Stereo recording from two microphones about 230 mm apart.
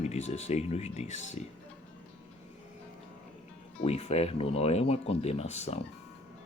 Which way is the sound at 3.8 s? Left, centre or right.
Left.